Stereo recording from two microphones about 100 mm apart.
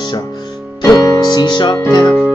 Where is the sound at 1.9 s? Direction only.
45° left (ahead or behind).